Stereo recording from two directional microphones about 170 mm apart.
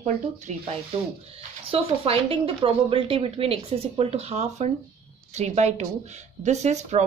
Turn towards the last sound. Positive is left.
turn(degrees=-40)  # may be behind; listen again after turning